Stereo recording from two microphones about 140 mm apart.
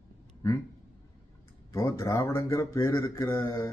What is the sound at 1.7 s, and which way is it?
A man's voice, 20° left (ahead or behind).